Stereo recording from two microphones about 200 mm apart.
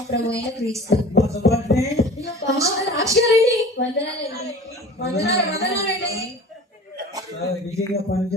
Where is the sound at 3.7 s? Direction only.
50° left (ahead or behind).